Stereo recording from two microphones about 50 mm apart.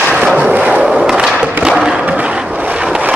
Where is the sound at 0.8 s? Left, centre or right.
Centre.